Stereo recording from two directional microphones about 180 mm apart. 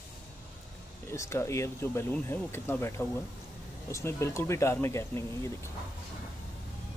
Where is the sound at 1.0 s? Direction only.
15° left (ahead or behind).